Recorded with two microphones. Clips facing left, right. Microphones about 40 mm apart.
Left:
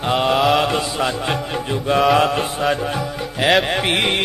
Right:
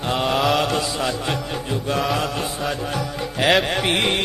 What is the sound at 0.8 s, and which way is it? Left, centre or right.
Speech, centre.